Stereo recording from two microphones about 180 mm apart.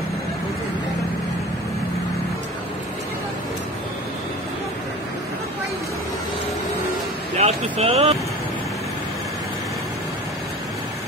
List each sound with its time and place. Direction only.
7.3 s speech: 35° right (ahead or behind)